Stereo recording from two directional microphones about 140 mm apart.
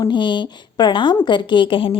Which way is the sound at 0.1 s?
35° left (ahead or behind).